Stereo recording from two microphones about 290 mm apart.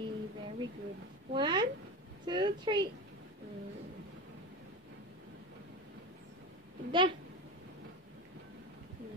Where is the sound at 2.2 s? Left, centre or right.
Centre.